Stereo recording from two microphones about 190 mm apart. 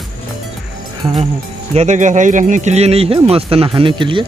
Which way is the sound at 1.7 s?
35° right (ahead or behind).